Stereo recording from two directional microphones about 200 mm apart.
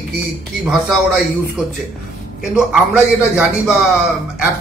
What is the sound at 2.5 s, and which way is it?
Speech, 5° right (ahead or behind).